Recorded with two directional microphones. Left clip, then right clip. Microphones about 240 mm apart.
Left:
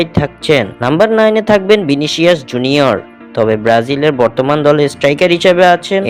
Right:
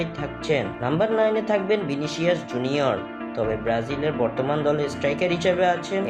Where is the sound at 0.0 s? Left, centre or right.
Left.